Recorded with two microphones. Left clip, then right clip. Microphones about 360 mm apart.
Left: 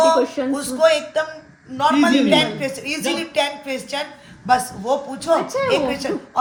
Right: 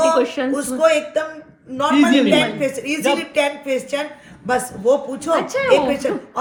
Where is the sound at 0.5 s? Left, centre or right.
Centre.